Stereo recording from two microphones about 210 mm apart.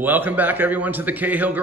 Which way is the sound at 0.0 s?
10° right (ahead or behind).